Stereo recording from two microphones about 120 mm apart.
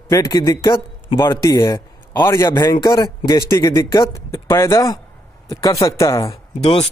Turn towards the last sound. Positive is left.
turn(degrees=60)  # may be behind; listen again after turning